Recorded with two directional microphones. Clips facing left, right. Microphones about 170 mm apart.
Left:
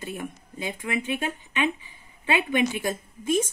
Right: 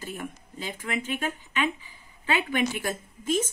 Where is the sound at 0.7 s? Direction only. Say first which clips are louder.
Left 2 dB; 20° left (ahead or behind).